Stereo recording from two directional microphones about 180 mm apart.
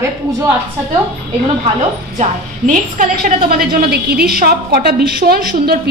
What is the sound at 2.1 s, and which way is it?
Speech, 45° right (ahead or behind).